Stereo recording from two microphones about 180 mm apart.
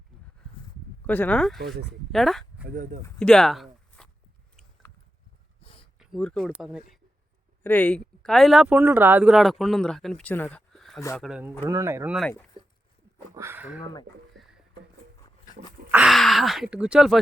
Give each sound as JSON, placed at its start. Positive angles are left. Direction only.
{"t": 1.0, "sound": "speech", "side_deg": 10}
{"t": 1.5, "sound": "speech", "side_deg": -70}
{"t": 2.1, "sound": "a sound", "side_deg": 0}
{"t": 2.6, "sound": "speech", "side_deg": -45}
{"t": 3.2, "sound": "a sound", "side_deg": 5}
{"t": 6.0, "sound": "speech", "side_deg": 5}
{"t": 7.6, "sound": "speech", "side_deg": 10}
{"t": 11.7, "sound": "speech", "side_deg": -15}
{"t": 12.6, "sound": "a sound", "side_deg": -25}
{"t": 13.3, "sound": "speech", "side_deg": -15}
{"t": 15.9, "sound": "speech", "side_deg": -5}